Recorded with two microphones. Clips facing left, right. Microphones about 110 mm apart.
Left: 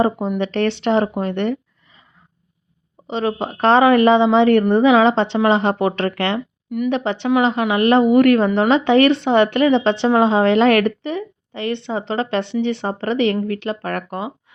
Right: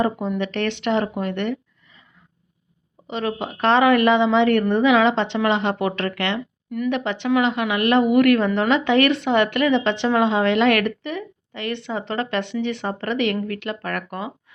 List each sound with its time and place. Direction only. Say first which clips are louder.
0.3 s speech: left 4 dB; 35° left (ahead or behind)
3.1 s speech: left 4 dB; 30° left (ahead or behind)
6.7 s speech: left 3 dB; 15° left (ahead or behind)
6.9 s speech: left 3 dB; 30° left (ahead or behind)